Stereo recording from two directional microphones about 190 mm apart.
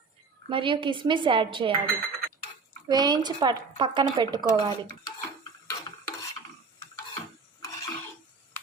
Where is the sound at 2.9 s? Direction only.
20° right (ahead or behind).